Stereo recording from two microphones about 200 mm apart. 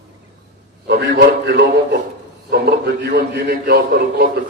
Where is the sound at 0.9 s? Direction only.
60° right (ahead or behind).